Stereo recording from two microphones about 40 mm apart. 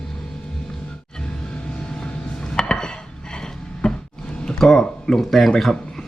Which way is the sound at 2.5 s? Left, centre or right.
Centre.